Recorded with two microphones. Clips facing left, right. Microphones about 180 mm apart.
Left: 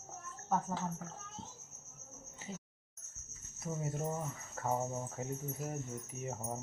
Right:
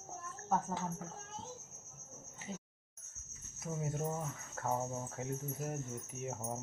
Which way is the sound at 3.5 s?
Centre (ahead or behind).